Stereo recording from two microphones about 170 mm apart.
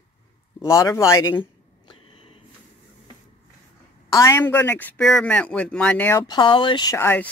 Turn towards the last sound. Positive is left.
turn(degrees=10)  # may be behind; listen again after turning